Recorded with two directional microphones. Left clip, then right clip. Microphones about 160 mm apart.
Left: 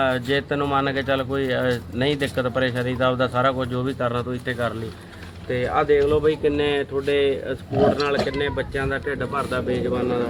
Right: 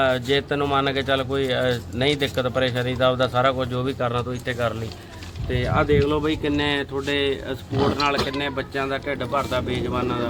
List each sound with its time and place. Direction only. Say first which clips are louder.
0.0 s speech: right 1 dB; 5° right (ahead or behind)
5.5 s speech: left 2 dB; 35° right (ahead or behind); by 10.1 s 50° right (ahead or behind)